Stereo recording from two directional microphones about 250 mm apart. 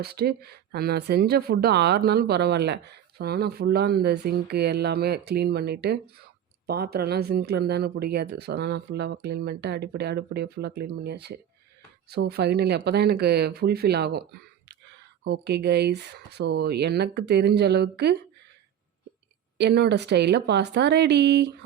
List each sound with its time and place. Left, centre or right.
0.0 s speech: right
19.5 s speech: right